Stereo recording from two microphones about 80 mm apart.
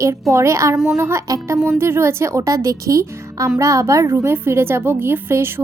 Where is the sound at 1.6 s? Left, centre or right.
Right.